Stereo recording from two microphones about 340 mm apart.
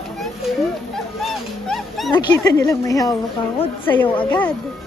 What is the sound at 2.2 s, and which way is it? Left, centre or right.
A woman's voice, centre.